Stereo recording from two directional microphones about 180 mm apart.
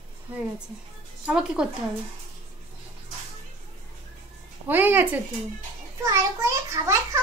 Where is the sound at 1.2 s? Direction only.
5° right (ahead or behind).